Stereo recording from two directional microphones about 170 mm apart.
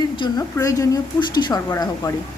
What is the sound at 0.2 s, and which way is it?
A woman's voice, 20° left (ahead or behind).